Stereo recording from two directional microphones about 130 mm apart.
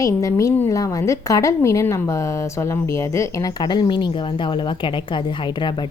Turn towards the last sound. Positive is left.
turn(degrees=35)  # may be behind; listen again after turning